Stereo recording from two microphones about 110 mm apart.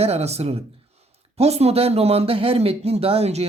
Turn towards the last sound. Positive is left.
turn(degrees=-70)  # may be behind; listen again after turning